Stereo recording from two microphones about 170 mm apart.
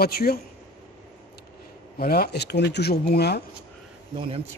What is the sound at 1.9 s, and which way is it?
Speech, 65° left (ahead or behind).